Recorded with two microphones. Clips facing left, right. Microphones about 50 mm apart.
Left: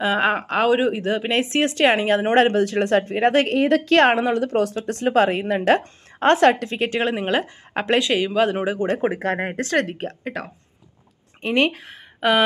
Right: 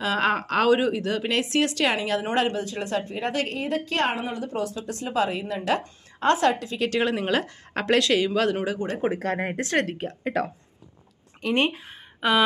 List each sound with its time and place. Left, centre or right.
0.0 s speech: left
6.9 s speech: left
9.6 s speech: left
11.5 s speech: left